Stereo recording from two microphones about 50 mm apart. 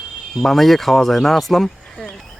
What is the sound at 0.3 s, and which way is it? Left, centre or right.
Speech, centre.